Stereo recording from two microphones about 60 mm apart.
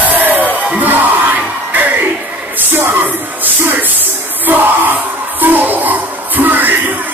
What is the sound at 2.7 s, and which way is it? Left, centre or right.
Music, right.